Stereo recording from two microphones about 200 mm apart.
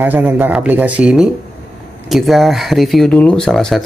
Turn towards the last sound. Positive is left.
turn(degrees=0)  # may be behind; listen again after turning